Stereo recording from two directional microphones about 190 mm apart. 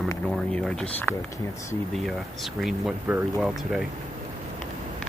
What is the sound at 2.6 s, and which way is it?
Speech, 5° right (ahead or behind).